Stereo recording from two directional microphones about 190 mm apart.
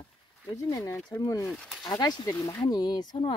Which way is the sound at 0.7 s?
20° left (ahead or behind).